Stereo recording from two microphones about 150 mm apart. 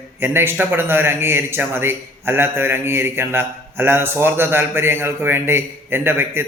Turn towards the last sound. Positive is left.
turn(degrees=-15)  # may be behind; listen again after turning